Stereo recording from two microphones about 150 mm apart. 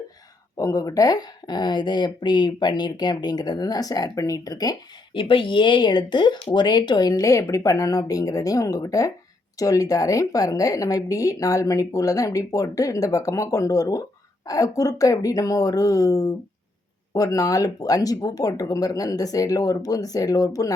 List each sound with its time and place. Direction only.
0.5 s speech: 25° left (ahead or behind)